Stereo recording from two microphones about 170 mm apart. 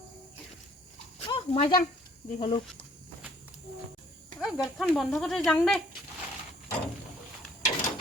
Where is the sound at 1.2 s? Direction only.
30° left (ahead or behind).